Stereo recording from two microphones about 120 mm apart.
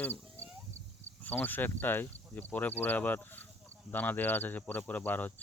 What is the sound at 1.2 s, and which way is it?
Speech, 15° left (ahead or behind).